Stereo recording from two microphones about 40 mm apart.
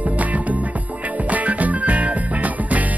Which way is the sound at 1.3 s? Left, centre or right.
Right.